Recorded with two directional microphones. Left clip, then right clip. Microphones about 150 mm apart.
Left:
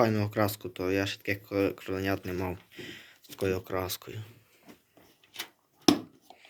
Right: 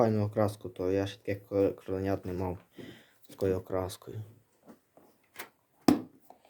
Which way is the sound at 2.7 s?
25° right (ahead or behind).